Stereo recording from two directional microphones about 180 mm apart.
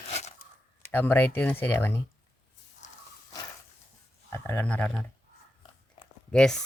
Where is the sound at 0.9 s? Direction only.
10° left (ahead or behind).